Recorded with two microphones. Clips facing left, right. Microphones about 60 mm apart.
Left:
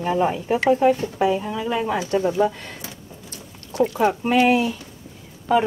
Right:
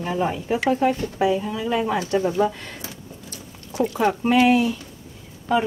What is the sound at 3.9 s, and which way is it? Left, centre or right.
Speech, centre.